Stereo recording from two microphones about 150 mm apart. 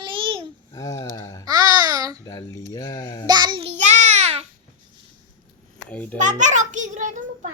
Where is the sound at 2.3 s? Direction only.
20° left (ahead or behind).